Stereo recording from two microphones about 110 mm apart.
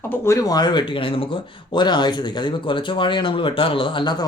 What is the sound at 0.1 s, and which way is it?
Speech, 25° left (ahead or behind).